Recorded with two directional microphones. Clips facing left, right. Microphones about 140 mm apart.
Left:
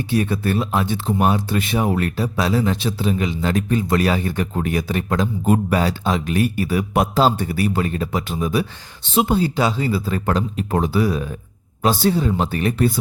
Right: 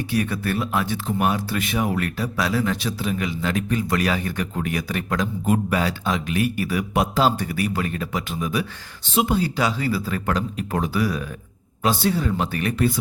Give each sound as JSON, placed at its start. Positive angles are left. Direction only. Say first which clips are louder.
{"t": 0.1, "sound": "a man's voice", "louder": "left 5 dB", "side_deg": 25}
{"t": 12.1, "sound": "speech", "louder": "left 3 dB", "side_deg": 25}